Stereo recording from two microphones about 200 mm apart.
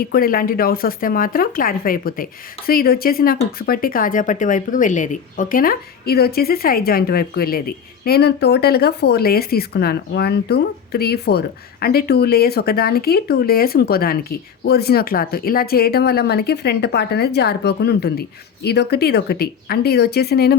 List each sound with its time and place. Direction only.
0.0 s speech: 50° left (ahead or behind)